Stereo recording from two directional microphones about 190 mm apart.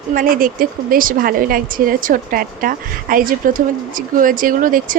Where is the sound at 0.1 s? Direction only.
45° right (ahead or behind).